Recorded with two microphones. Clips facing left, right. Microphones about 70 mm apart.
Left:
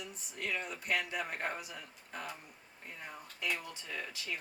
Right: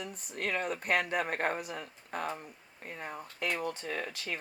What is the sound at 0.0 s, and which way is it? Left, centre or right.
Speech, right.